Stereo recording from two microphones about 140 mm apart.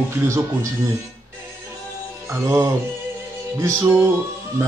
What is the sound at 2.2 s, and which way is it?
Speech, 20° right (ahead or behind).